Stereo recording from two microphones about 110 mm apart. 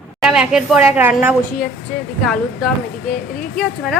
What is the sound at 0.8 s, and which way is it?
Speech, 15° right (ahead or behind).